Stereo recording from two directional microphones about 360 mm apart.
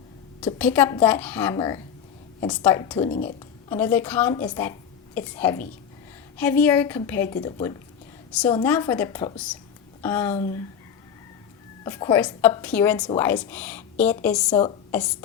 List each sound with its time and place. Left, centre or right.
0.4 s a woman's voice: centre
3.1 s a woman's voice: left
3.7 s a woman's voice: centre
10.3 s a woman's voice: centre
11.8 s a woman's voice: centre